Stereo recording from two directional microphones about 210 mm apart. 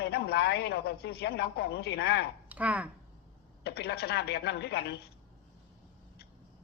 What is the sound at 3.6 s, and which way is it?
A woman's voice, 50° left (ahead or behind).